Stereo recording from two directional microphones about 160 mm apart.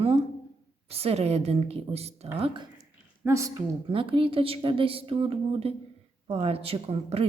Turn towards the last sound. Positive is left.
turn(degrees=-35)  # may be behind; listen again after turning